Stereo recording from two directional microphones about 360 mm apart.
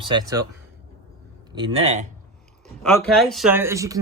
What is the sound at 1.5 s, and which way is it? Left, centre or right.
Speech, centre.